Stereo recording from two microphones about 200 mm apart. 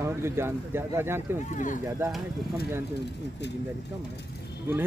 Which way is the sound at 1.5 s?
40° left (ahead or behind).